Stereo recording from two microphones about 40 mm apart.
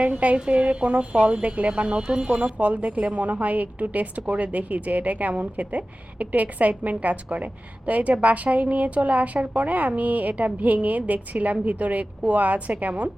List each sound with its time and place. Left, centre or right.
0.0 s a woman's voice: right
2.4 s a woman's voice: right